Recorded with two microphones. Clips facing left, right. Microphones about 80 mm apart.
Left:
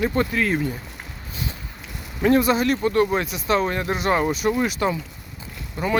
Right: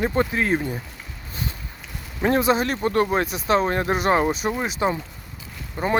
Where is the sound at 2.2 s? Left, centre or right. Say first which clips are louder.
Left 2 dB; right.